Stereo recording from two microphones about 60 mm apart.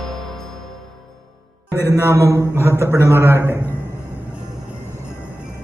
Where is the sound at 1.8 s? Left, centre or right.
Right.